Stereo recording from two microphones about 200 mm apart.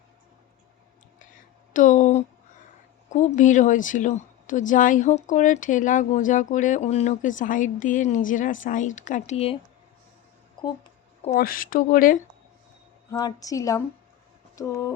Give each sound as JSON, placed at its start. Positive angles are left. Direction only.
{"t": 1.7, "sound": "a sound", "side_deg": 40}
{"t": 3.1, "sound": "a woman's voice", "side_deg": 40}
{"t": 11.3, "sound": "speech", "side_deg": 45}
{"t": 13.1, "sound": "a woman's voice", "side_deg": 20}